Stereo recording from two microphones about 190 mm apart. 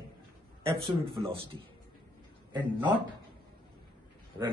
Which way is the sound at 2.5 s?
10° right (ahead or behind).